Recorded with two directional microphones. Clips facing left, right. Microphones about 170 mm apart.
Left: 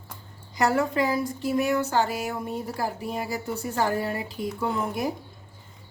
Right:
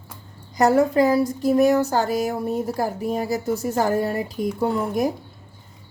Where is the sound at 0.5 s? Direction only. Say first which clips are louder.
Right 7 dB; 40° right (ahead or behind).